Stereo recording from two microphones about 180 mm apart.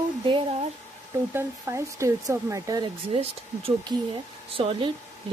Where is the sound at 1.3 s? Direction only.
15° right (ahead or behind).